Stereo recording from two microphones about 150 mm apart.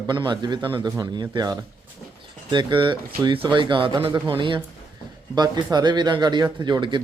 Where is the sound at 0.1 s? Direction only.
30° right (ahead or behind).